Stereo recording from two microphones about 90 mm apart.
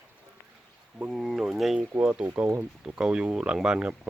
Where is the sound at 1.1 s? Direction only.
Centre (ahead or behind).